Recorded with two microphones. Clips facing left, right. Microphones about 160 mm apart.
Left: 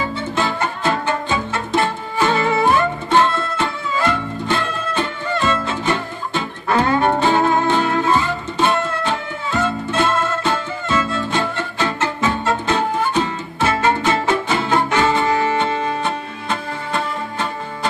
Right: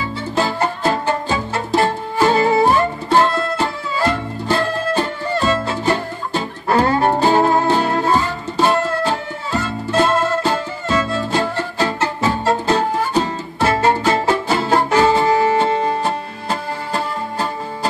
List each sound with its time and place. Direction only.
0.2 s music: 35° right (ahead or behind)